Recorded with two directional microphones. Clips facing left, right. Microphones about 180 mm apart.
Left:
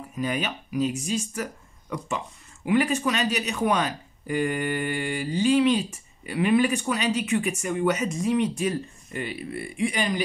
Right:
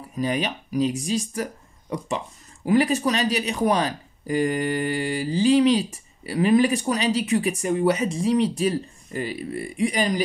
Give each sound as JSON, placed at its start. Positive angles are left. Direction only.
{"t": 0.2, "sound": "speech", "side_deg": -35}